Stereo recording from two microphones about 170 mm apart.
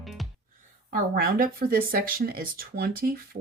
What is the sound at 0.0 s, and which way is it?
Music, centre (ahead or behind).